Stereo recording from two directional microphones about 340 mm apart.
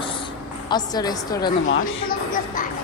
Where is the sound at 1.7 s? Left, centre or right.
Left.